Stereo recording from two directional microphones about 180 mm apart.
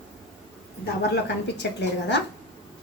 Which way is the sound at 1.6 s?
80° left.